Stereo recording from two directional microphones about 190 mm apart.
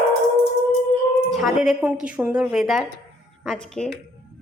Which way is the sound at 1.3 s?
Centre (ahead or behind).